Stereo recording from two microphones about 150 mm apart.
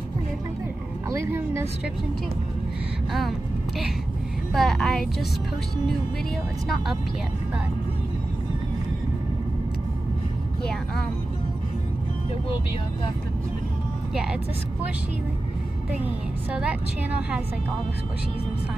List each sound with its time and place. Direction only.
1.3 s a woman's voice: 20° right (ahead or behind)
3.1 s speech: centre (ahead or behind)
4.6 s speech: 5° left (ahead or behind)
10.6 s speech: 5° left (ahead or behind)
16.5 s a woman's voice: 5° right (ahead or behind)